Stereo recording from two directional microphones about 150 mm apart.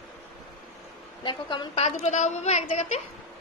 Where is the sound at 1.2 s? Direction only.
30° left (ahead or behind).